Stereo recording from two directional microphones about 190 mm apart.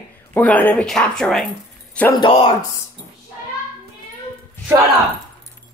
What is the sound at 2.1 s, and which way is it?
Speech, 25° left (ahead or behind).